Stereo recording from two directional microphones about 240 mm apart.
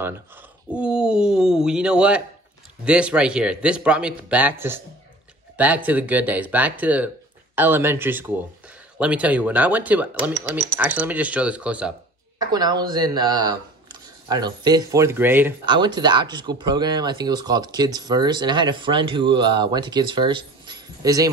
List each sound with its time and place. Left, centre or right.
0.7 s speech: centre
5.9 s speech: centre
12.4 s speech: centre
15.6 s speech: centre